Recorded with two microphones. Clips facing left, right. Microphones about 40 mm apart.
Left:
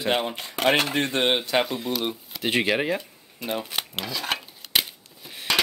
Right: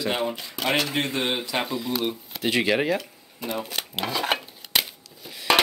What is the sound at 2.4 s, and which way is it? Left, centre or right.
Speech, left.